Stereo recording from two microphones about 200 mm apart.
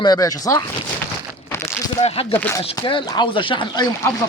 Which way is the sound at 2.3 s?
10° left (ahead or behind).